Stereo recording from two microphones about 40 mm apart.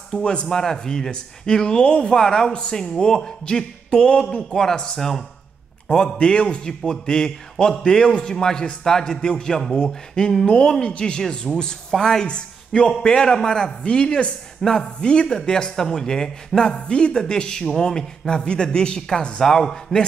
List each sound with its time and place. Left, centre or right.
0.1 s a man's voice: left
0.5 s a man's voice: centre
10.4 s a man's voice: left
14.6 s speech: centre
15.0 s a man's voice: left